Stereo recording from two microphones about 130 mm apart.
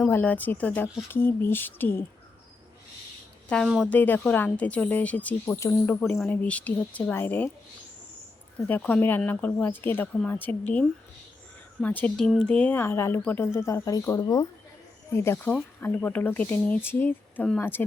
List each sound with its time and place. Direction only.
0.1 s speech: 15° left (ahead or behind)
3.5 s speech: 10° left (ahead or behind)
8.5 s speech: 10° left (ahead or behind); by 14.4 s 30° left (ahead or behind)
15.1 s speech: 20° left (ahead or behind)